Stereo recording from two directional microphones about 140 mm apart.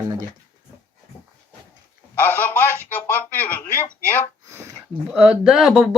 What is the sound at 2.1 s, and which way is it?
Telephone, 15° left (ahead or behind).